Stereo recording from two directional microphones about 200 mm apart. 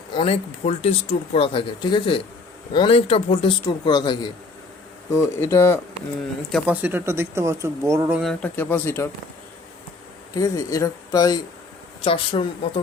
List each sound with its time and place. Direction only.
0.1 s speech: 30° left (ahead or behind)
6.5 s speech: 10° right (ahead or behind)
8.2 s speech: 5° left (ahead or behind)
10.3 s speech: 15° left (ahead or behind)